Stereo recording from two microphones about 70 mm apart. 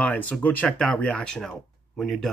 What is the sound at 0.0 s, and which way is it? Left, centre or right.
Speech, left.